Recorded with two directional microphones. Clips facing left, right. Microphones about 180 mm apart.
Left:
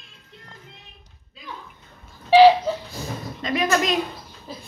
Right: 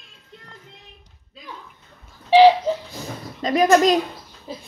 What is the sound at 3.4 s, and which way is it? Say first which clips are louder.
Speech: right 7 dB; 35° right (ahead or behind).